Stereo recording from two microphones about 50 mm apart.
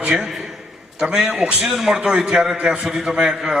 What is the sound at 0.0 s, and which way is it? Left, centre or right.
Speech, centre.